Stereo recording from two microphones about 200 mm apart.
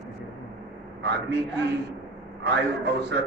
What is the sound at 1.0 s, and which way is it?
Speech, 60° right (ahead or behind).